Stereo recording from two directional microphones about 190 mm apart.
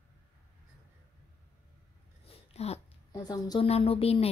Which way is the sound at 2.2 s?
35° left (ahead or behind).